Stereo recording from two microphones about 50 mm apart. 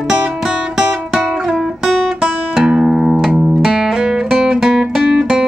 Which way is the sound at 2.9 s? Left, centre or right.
Centre.